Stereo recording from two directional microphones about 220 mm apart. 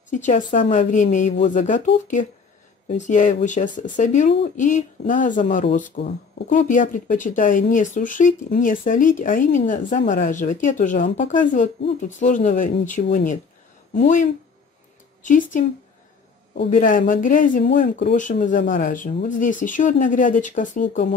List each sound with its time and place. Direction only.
0.1 s speech: 35° left (ahead or behind)
16.7 s speech: 35° left (ahead or behind)